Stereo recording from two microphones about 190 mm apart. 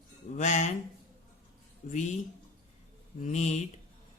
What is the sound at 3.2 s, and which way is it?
Speech, 40° left (ahead or behind).